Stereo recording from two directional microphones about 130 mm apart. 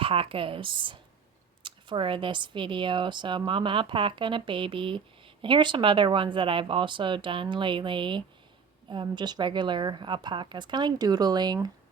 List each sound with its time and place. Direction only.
0.0 s a woman's voice: 45° right (ahead or behind)